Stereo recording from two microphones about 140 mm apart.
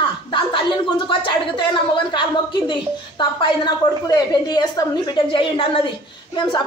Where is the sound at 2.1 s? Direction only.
35° left (ahead or behind).